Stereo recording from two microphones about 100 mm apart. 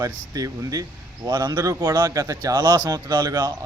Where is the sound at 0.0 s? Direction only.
35° right (ahead or behind).